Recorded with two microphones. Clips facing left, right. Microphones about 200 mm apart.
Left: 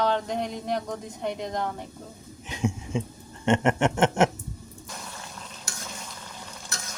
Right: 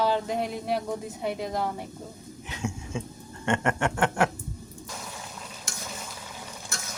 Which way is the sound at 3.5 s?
20° left (ahead or behind).